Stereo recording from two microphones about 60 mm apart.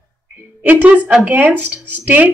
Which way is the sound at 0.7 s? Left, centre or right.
Right.